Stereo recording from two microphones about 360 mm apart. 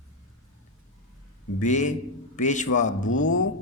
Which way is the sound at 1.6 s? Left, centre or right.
Centre.